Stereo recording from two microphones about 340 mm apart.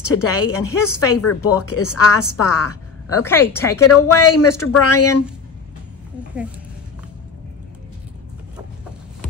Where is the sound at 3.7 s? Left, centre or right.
Left.